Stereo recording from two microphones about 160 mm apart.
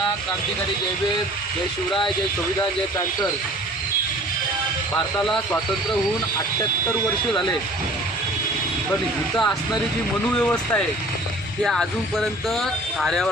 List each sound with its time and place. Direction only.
6.6 s speech: 20° left (ahead or behind)
9.3 s speech: 10° left (ahead or behind)